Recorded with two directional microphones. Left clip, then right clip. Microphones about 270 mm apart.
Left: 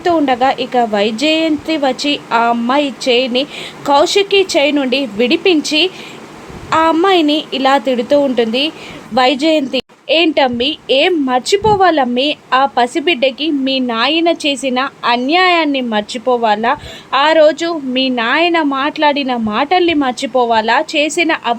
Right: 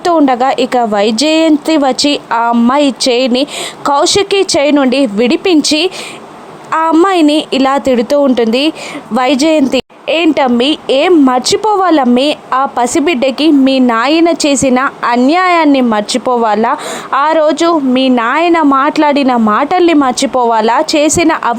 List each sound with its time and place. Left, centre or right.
0.0 s a woman's voice: right